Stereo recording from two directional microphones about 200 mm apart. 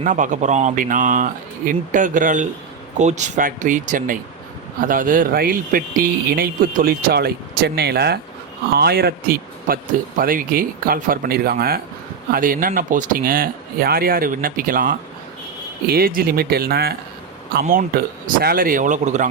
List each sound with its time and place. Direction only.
0.0 s speech: 40° right (ahead or behind)